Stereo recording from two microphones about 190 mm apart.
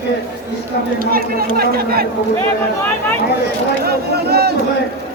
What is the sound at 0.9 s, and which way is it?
Speech, 50° right (ahead or behind).